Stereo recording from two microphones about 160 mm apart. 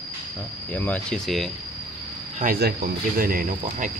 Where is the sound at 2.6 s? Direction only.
65° right (ahead or behind).